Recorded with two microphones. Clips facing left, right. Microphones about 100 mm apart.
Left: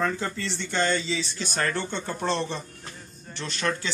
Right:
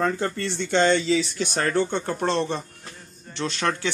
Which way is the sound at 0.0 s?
60° right (ahead or behind).